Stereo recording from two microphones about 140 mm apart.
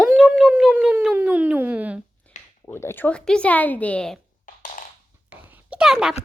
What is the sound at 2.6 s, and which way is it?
Speech, 20° left (ahead or behind).